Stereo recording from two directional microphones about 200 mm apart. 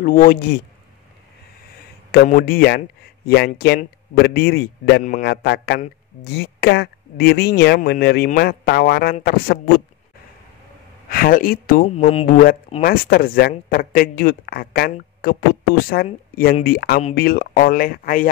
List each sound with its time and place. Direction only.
0.0 s speech: 45° left (ahead or behind)
2.2 s speech: 45° left (ahead or behind)
11.1 s speech: 45° left (ahead or behind)
11.9 s speech: 30° left (ahead or behind)
12.3 s speech: 45° left (ahead or behind)